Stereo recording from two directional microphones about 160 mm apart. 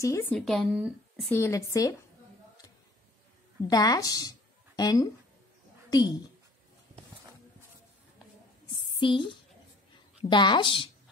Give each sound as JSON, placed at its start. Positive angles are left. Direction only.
{"t": 0.0, "sound": "speech", "side_deg": 20}
{"t": 0.3, "sound": "speech", "side_deg": 5}
{"t": 1.3, "sound": "speech", "side_deg": 20}
{"t": 3.6, "sound": "a woman's voice", "side_deg": 25}
{"t": 8.9, "sound": "a woman's voice", "side_deg": 30}